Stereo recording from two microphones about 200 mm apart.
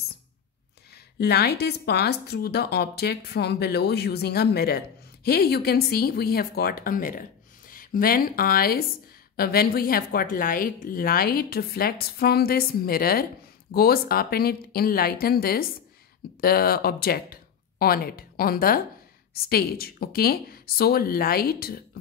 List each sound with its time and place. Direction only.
1.1 s speech: 50° left (ahead or behind)